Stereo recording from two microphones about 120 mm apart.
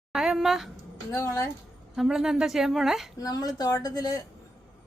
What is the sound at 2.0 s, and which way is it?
A woman's voice, 5° right (ahead or behind).